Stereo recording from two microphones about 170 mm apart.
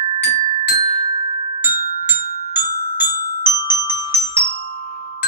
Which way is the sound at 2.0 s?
70° left (ahead or behind).